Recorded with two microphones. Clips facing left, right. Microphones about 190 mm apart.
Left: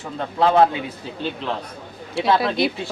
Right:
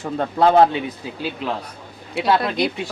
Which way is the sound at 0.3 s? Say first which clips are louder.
Right 2 dB; 40° right (ahead or behind).